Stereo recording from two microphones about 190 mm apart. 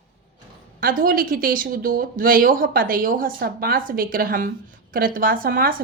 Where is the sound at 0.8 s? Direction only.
50° right (ahead or behind).